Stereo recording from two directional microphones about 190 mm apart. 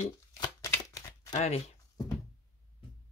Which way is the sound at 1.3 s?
35° left (ahead or behind).